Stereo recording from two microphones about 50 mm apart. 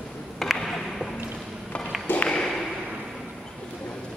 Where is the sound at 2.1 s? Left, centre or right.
Left.